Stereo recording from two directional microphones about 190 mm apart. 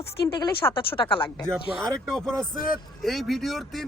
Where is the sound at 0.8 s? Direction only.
25° left (ahead or behind).